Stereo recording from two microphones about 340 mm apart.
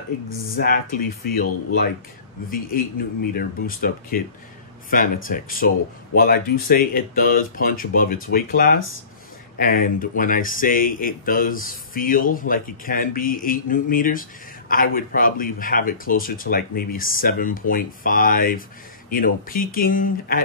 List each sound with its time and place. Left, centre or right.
0.6 s speech: left